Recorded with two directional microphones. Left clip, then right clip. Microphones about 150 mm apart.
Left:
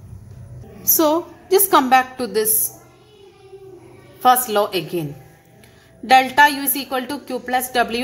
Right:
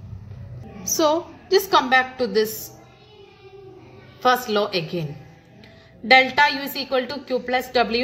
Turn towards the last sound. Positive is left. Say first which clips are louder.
# left 2 dB
turn(degrees=50)  # may be behind; listen again after turning